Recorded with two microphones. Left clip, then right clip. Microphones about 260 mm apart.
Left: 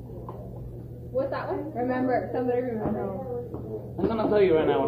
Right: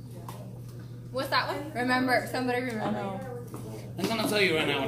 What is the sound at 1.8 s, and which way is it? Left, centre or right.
Speech, right.